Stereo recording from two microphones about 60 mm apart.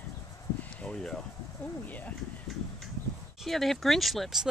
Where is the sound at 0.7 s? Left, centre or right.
Centre.